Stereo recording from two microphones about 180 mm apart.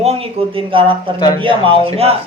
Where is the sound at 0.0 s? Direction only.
35° right (ahead or behind).